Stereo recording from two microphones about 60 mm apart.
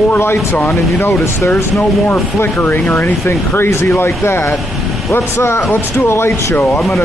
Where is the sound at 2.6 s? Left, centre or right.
Left.